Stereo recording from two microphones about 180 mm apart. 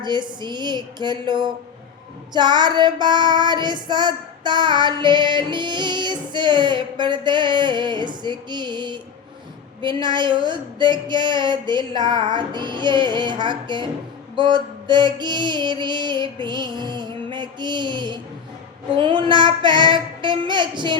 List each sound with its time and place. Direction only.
0.0 s child singing: 25° right (ahead or behind)